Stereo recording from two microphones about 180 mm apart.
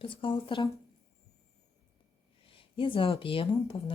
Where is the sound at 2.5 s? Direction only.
30° left (ahead or behind).